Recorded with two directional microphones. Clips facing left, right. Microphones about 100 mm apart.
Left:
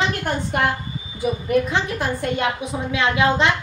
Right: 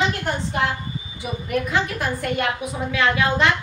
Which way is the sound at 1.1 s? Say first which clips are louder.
Left 6 dB; 30° left (ahead or behind).